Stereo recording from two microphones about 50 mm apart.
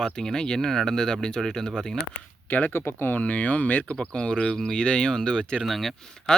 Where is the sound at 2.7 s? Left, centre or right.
Left.